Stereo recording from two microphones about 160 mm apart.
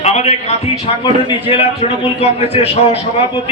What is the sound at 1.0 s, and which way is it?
A man's voice, 30° left (ahead or behind).